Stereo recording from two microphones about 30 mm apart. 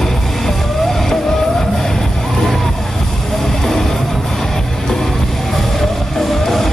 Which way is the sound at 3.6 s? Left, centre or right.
Centre.